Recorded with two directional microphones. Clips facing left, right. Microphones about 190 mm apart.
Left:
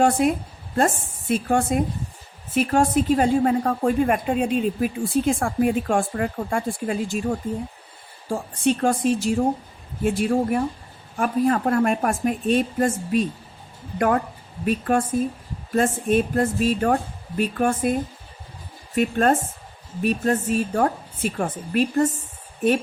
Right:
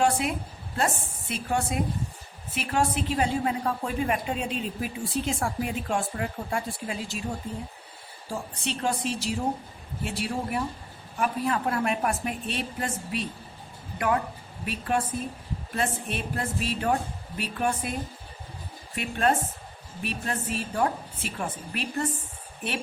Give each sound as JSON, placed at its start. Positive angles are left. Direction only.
{"t": 0.0, "sound": "a woman's voice", "side_deg": 45}
{"t": 8.3, "sound": "a woman's voice", "side_deg": 50}
{"t": 14.6, "sound": "a woman's voice", "side_deg": 45}
{"t": 18.9, "sound": "a woman's voice", "side_deg": 45}